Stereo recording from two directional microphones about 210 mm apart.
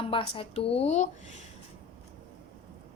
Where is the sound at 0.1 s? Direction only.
25° left (ahead or behind).